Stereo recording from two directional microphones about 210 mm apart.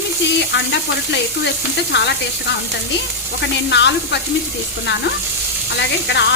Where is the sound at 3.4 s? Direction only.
55° left (ahead or behind).